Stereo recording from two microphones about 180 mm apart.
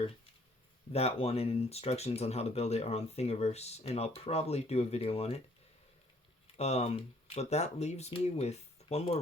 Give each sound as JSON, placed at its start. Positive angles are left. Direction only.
{"t": 0.9, "sound": "speech", "side_deg": 35}
{"t": 6.6, "sound": "speech", "side_deg": 35}